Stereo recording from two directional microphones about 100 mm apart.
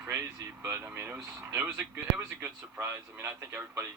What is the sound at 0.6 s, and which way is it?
Speech, 25° right (ahead or behind).